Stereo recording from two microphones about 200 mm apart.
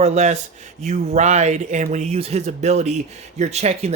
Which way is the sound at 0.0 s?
35° right (ahead or behind).